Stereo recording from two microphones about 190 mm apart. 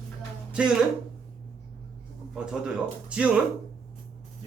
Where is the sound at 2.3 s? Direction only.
5° right (ahead or behind).